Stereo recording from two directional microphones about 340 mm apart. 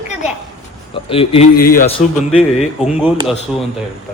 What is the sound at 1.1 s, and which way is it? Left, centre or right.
Speech, centre.